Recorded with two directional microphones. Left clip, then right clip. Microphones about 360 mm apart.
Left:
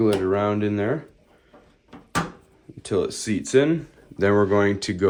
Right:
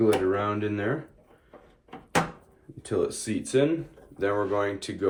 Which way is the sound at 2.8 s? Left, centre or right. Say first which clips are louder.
Left 3 dB; centre.